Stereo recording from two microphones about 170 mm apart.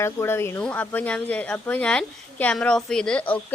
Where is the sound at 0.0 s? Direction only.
15° left (ahead or behind).